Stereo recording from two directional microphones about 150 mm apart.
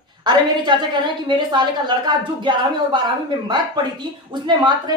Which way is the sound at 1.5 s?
30° right (ahead or behind).